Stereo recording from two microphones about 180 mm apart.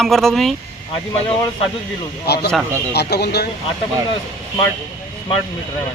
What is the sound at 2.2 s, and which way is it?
Speech, 65° left (ahead or behind).